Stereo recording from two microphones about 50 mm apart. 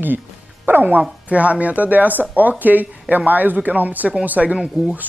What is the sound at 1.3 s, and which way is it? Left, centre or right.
Speech, right.